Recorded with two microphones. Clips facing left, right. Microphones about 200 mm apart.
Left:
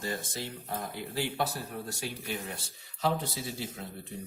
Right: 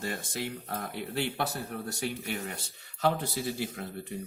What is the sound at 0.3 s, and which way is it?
Speech, 65° right (ahead or behind).